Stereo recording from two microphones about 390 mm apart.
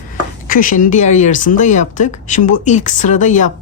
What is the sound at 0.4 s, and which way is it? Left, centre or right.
A woman's voice, left.